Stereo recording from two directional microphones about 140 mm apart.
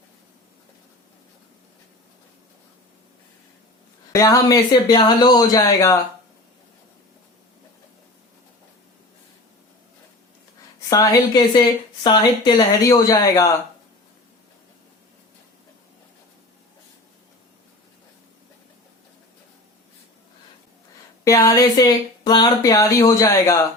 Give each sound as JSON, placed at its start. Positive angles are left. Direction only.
{"t": 4.1, "sound": "speech", "side_deg": 20}
{"t": 10.8, "sound": "speech", "side_deg": 30}
{"t": 21.2, "sound": "speech", "side_deg": 25}